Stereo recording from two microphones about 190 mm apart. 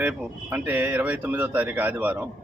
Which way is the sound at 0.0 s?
10° right (ahead or behind).